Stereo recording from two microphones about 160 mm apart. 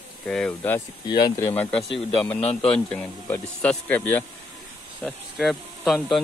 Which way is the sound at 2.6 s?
5° left (ahead or behind).